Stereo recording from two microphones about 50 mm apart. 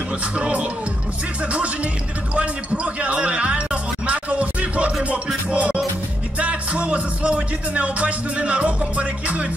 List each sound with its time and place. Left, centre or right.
0.4 s music: right
2.3 s speech: right
5.0 s music: right